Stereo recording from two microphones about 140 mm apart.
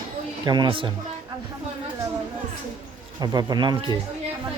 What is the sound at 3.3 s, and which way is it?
Speech, 30° right (ahead or behind).